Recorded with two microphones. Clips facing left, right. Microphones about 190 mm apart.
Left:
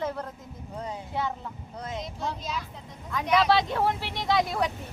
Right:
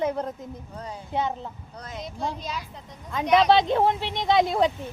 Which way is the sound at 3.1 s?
25° right (ahead or behind).